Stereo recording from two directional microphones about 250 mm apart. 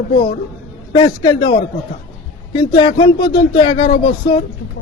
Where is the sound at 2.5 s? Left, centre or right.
Centre.